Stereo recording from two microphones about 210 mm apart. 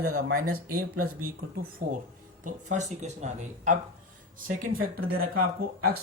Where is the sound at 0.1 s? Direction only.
45° right (ahead or behind).